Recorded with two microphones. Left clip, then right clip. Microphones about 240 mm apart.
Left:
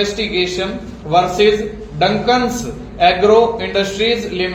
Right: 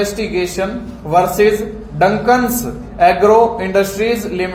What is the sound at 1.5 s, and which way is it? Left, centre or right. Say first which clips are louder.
A man's voice: right 2 dB; right.